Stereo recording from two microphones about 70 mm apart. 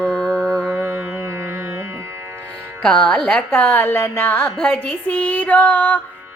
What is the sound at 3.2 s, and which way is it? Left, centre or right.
A woman's voice, left.